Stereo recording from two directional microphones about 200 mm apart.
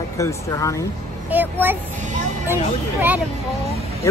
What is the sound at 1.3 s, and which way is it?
Speech, 10° right (ahead or behind).